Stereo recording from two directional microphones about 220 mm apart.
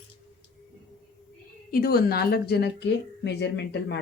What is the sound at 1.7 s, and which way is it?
A woman's voice, 45° left (ahead or behind).